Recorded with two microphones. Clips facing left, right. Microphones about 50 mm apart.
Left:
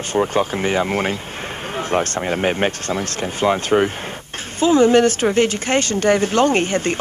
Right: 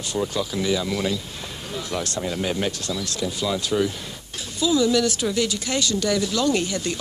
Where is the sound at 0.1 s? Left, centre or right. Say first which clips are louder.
Left 7 dB; left.